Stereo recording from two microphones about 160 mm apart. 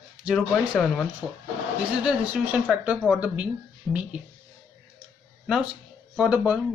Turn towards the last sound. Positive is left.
turn(degrees=-10)  # may be behind; listen again after turning